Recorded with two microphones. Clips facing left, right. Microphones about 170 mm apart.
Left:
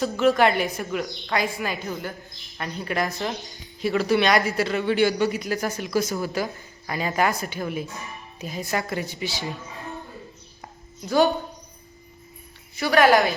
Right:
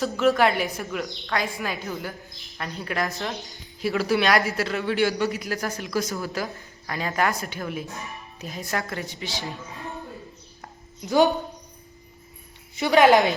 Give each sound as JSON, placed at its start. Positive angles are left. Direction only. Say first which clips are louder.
{"t": 0.0, "sound": "speech", "louder": "left 1 dB", "side_deg": 0}
{"t": 12.7, "sound": "a woman's voice", "louder": "right 1 dB", "side_deg": -20}